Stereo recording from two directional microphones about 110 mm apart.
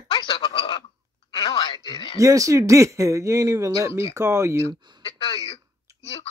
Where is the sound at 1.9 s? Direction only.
55° left (ahead or behind).